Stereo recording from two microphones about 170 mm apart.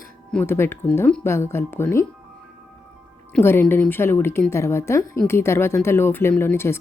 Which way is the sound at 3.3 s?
15° left (ahead or behind).